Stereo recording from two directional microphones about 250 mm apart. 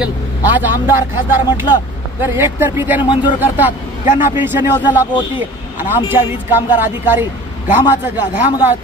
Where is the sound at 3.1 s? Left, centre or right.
Centre.